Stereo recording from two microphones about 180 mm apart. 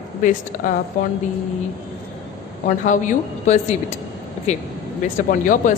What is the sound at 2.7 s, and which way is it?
Speech, 45° left (ahead or behind).